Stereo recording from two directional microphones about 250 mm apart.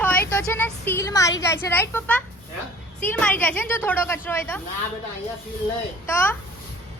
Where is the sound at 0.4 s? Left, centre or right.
Centre.